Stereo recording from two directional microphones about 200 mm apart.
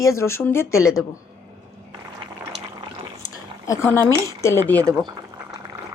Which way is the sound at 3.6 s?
15° left (ahead or behind).